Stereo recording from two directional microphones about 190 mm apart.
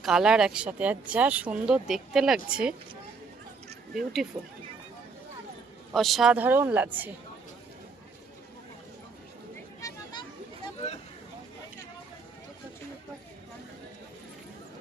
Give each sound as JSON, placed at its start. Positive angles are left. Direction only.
{"t": 0.0, "sound": "speech", "side_deg": -5}
{"t": 3.9, "sound": "speech", "side_deg": 0}
{"t": 5.9, "sound": "speech", "side_deg": 0}
{"t": 9.8, "sound": "a sound", "side_deg": 20}